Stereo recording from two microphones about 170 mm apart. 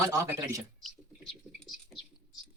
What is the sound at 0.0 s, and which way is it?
Speech, 20° right (ahead or behind).